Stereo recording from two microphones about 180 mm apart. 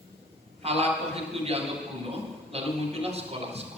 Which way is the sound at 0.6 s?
35° right (ahead or behind).